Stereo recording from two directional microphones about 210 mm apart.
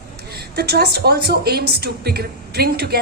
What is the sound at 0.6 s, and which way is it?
A woman's voice, 50° right (ahead or behind).